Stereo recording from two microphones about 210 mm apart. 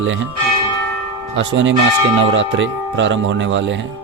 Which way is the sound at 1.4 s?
60° right (ahead or behind).